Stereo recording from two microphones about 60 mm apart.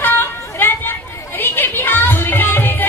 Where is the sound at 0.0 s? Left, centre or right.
Left.